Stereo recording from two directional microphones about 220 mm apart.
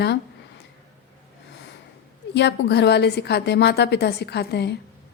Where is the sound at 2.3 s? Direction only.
50° left (ahead or behind).